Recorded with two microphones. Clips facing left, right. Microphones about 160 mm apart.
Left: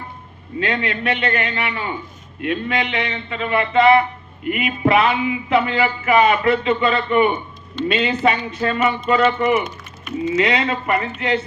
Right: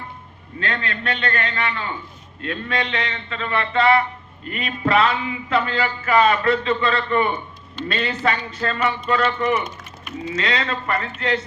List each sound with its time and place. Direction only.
0.6 s a man's voice: 15° left (ahead or behind)